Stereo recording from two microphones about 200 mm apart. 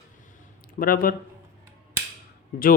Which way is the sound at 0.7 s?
45° left (ahead or behind).